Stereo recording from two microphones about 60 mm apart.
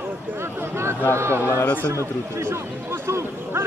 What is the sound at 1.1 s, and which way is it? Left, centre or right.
Speech, right.